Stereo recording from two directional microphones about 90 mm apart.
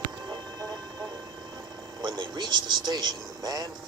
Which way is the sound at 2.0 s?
55° right (ahead or behind).